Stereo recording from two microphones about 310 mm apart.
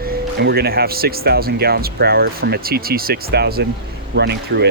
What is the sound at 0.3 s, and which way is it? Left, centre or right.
Speech, right.